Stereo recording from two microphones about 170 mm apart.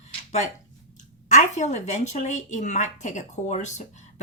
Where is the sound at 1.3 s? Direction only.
45° left (ahead or behind).